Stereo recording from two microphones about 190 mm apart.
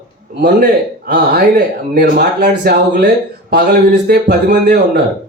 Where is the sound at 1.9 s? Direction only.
55° right (ahead or behind).